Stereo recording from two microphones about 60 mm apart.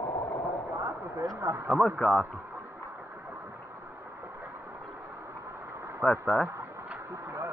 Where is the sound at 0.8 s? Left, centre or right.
Right.